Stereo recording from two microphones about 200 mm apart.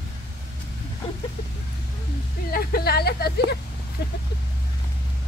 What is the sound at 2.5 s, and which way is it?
Speech, 50° left (ahead or behind).